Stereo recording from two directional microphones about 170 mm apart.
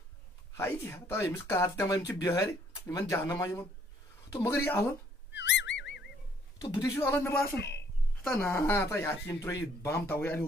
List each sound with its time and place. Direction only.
0.6 s speech: 15° left (ahead or behind)
5.3 s whistling: 90° left
6.6 s speech: 25° left (ahead or behind)
7.5 s speech: 90° left
8.3 s speech: 15° left (ahead or behind)